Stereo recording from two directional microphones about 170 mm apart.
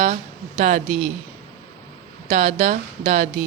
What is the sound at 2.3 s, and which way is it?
Speech, 45° right (ahead or behind).